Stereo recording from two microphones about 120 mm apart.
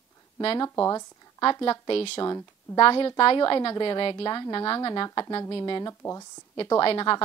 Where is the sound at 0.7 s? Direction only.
25° left (ahead or behind).